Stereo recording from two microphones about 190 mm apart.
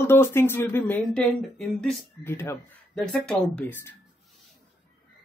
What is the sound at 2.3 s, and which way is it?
Speech, 15° left (ahead or behind).